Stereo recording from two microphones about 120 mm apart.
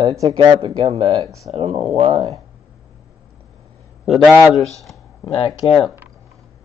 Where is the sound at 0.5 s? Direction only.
55° right (ahead or behind).